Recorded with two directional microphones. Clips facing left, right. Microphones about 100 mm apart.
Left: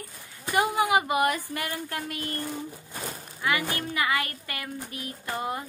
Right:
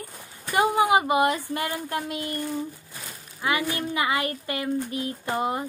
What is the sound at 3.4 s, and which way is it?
Speech, 20° right (ahead or behind).